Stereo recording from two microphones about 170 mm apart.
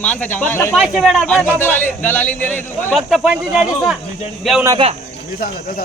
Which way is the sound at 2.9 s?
Centre (ahead or behind).